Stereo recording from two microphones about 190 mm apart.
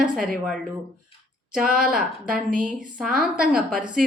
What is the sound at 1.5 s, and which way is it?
A woman's voice, 5° right (ahead or behind).